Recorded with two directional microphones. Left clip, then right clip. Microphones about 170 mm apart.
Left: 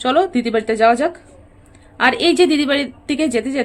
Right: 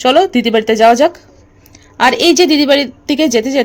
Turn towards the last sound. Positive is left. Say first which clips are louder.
# right 7 dB
turn(degrees=-35)  # may be behind; listen again after turning